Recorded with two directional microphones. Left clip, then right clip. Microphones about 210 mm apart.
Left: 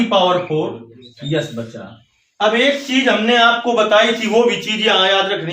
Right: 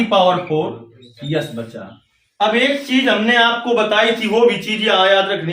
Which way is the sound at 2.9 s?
15° left (ahead or behind).